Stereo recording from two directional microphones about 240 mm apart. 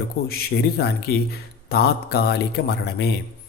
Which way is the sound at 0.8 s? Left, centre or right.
Left.